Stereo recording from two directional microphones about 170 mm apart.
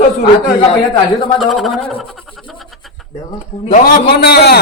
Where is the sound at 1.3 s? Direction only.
Centre (ahead or behind).